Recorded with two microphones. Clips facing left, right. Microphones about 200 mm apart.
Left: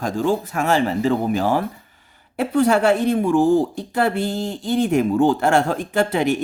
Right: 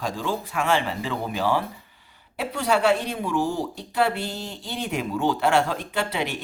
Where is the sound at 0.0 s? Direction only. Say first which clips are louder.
Left 7 dB; 50° left (ahead or behind).